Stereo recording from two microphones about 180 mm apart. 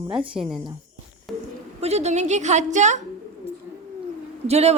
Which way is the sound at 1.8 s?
35° right (ahead or behind).